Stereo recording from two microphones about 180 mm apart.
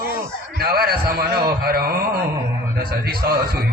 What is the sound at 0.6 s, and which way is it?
Speech, 55° right (ahead or behind).